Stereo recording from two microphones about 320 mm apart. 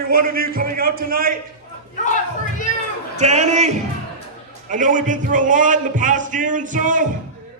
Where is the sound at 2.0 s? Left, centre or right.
Left.